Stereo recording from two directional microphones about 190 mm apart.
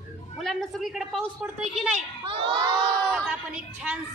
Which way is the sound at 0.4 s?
Centre (ahead or behind).